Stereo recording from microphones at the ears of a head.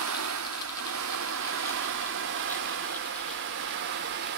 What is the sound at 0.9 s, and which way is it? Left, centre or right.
Vehicle, right.